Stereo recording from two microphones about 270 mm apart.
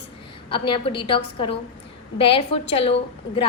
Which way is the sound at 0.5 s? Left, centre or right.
Centre.